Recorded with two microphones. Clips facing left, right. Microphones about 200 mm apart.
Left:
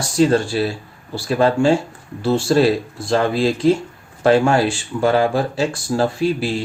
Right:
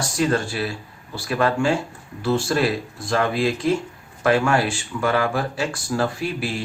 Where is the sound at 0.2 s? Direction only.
30° left (ahead or behind).